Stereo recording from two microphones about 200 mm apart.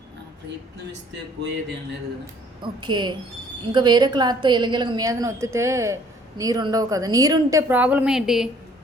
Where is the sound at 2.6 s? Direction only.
25° right (ahead or behind); by 8.5 s centre (ahead or behind).